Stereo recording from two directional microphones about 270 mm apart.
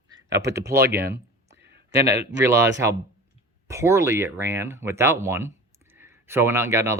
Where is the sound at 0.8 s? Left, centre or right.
Right.